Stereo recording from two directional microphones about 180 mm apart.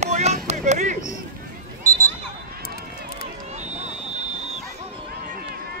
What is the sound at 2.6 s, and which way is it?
Run, 60° left (ahead or behind).